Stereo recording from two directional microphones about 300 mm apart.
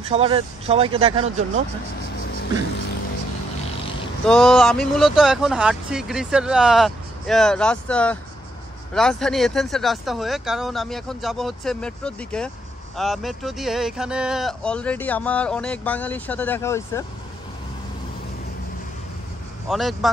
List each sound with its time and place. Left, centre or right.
0.1 s speech: centre
4.3 s speech: centre
19.7 s speech: centre